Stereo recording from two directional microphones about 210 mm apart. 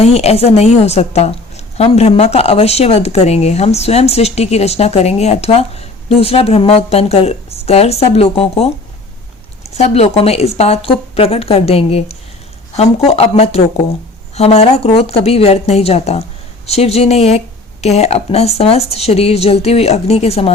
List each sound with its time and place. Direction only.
0.0 s a woman's voice: 30° left (ahead or behind)